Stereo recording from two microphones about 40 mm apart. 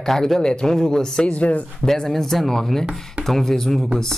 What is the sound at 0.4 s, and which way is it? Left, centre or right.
Speech, left.